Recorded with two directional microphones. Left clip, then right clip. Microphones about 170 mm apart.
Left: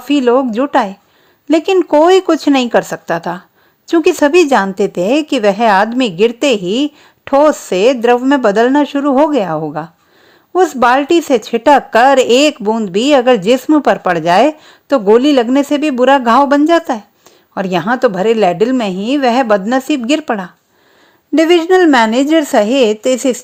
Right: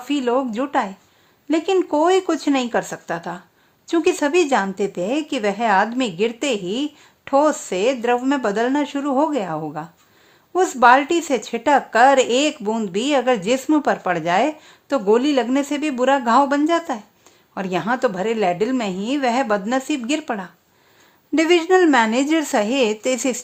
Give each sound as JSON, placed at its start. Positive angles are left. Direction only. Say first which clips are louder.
{"t": 0.0, "sound": "a woman's voice", "louder": "left 9 dB", "side_deg": 30}